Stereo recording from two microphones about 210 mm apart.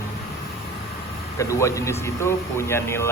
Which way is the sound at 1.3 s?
15° left (ahead or behind).